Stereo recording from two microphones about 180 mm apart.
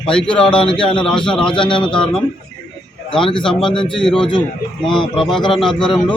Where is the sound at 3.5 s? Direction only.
5° left (ahead or behind).